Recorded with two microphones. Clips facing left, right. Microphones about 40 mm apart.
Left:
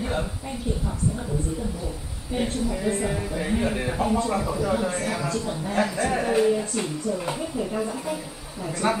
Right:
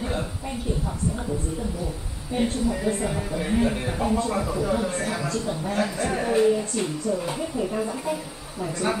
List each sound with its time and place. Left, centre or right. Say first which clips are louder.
2.3 s a man's voice: right 2 dB; centre
5.7 s a woman's voice: left 3 dB; centre
8.8 s a woman's voice: left 3 dB; centre